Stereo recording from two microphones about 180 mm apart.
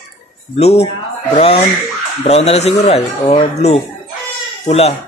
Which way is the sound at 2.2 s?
35° left (ahead or behind).